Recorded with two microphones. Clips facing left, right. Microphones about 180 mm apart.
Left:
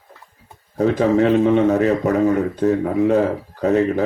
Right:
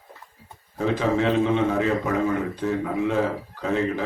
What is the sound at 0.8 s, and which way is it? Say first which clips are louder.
A man's voice: left 7 dB; 40° left (ahead or behind).